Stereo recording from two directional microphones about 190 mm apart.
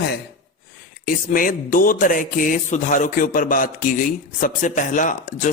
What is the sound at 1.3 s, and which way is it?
A man's voice, 45° left (ahead or behind).